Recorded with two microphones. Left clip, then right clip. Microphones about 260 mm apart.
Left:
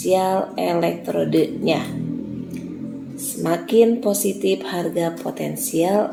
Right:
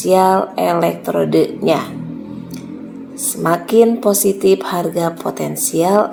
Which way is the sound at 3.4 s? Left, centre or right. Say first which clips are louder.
Right 4 dB; right.